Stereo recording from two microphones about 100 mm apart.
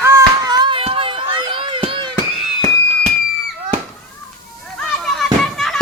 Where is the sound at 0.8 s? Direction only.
65° right (ahead or behind).